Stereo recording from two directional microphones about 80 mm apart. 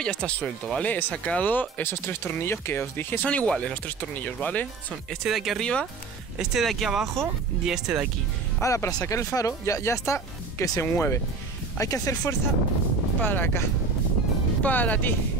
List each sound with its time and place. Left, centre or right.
0.0 s speech: centre
3.3 s speech: centre
5.2 s speech: centre
5.6 s speech: centre
6.3 s speech: centre
8.5 s speech: left
13.2 s speech: left